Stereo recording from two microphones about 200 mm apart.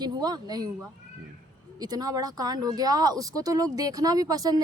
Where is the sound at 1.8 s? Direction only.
20° right (ahead or behind).